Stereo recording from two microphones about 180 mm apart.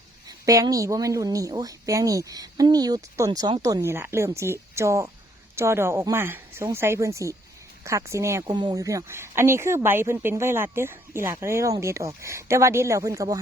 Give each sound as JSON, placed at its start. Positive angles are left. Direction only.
{"t": 0.3, "sound": "a woman's voice", "side_deg": -20}